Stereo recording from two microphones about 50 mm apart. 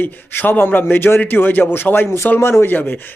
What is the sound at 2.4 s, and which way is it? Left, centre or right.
Speech, left.